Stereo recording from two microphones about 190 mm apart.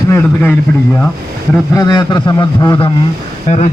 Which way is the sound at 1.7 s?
20° left (ahead or behind).